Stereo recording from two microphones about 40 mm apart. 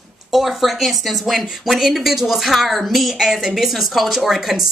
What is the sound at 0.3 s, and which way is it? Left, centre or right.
Speech, centre.